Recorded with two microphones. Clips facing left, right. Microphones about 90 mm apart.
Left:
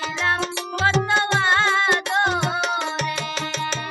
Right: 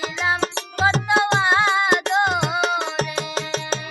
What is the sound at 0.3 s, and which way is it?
Music, 40° right (ahead or behind).